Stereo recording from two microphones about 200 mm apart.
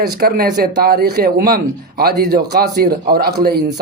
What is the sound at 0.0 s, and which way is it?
Speech, 50° right (ahead or behind).